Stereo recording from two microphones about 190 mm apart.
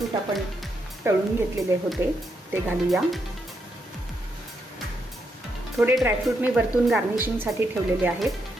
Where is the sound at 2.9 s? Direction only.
Centre (ahead or behind).